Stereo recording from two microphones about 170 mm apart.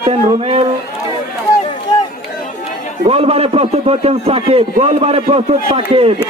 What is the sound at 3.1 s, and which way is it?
A man's voice, 35° right (ahead or behind).